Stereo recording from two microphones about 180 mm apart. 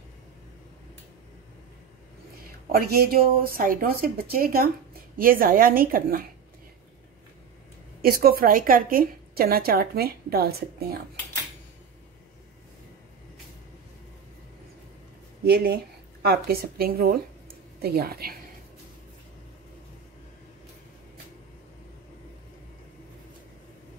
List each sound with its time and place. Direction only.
2.7 s a woman's voice: 55° right (ahead or behind)
8.0 s a woman's voice: 55° right (ahead or behind)
15.4 s a woman's voice: 60° right (ahead or behind)